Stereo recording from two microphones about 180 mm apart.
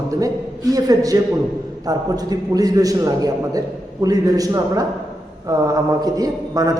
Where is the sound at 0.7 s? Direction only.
20° right (ahead or behind).